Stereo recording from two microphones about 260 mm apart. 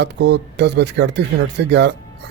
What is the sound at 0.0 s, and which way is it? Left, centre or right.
Speech, right.